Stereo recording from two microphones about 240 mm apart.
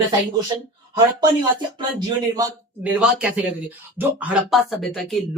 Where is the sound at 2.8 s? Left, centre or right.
Centre.